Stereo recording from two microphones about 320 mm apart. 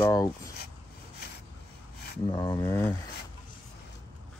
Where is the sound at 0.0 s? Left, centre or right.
Centre.